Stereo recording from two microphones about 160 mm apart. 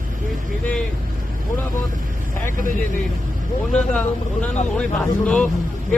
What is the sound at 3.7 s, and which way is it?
Speech, 5° left (ahead or behind).